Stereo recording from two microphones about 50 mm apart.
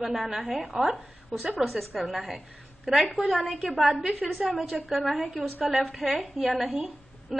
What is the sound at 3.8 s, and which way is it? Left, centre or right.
A woman's voice, centre.